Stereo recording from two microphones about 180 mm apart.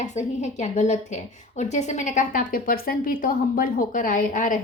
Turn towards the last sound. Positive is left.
turn(degrees=45)  # may be behind; listen again after turning